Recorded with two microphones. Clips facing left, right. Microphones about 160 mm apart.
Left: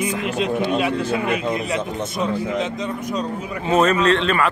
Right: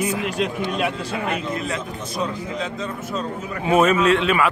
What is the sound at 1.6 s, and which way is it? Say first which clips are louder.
Speech: left 4 dB; 70° left (ahead or behind).